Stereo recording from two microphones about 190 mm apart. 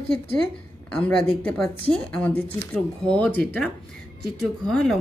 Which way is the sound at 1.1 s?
5° left (ahead or behind).